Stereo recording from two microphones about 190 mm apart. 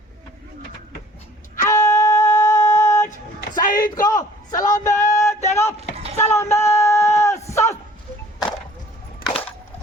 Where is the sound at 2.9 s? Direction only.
40° left (ahead or behind).